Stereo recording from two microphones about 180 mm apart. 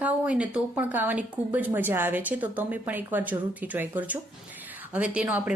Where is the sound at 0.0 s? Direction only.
5° right (ahead or behind).